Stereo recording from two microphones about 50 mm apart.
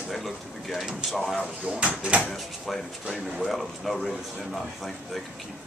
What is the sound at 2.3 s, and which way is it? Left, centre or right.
A man's voice, centre.